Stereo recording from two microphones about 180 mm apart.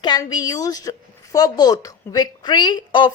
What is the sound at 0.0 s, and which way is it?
Speech, 25° left (ahead or behind).